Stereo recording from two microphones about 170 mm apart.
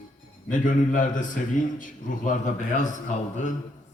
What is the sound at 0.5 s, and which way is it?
Speech, 50° left (ahead or behind).